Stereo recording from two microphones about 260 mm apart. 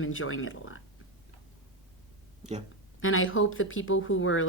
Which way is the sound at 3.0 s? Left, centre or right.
Left.